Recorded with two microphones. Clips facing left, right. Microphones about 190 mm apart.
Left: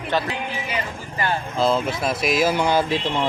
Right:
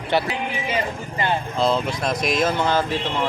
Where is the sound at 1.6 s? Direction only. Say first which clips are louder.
Left 2 dB; 5° left (ahead or behind).